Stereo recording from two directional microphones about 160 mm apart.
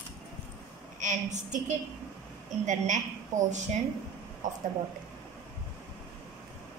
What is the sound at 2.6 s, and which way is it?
Speech, 50° right (ahead or behind).